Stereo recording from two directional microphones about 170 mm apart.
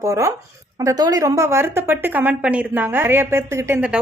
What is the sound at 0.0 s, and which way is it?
Speech, 20° right (ahead or behind).